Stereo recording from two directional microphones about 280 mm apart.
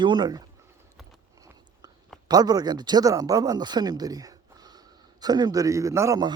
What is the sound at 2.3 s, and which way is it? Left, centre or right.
Speech, centre.